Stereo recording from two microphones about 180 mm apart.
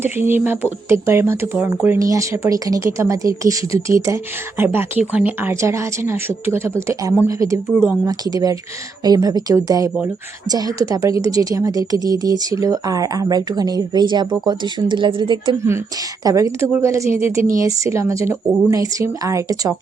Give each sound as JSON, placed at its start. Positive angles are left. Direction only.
{"t": 0.0, "sound": "speech", "side_deg": -10}